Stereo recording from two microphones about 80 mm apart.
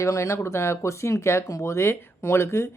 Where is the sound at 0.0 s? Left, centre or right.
Left.